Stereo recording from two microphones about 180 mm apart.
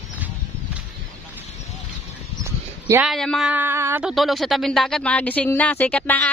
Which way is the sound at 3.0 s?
Centre (ahead or behind).